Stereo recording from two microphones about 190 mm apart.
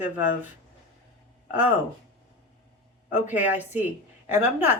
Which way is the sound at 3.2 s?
10° right (ahead or behind).